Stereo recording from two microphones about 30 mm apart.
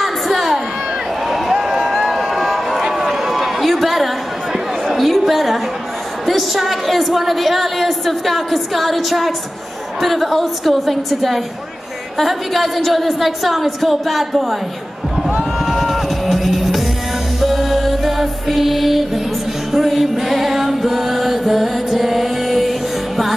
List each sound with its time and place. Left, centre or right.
0.0 s crowd: centre
1.3 s a sound: centre
2.1 s crowd: centre
3.0 s a sound: centre
6.2 s a woman's voice: centre
15.6 s music: centre